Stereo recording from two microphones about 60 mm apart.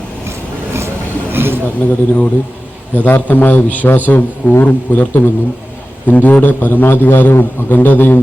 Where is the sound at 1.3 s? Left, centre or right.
Right.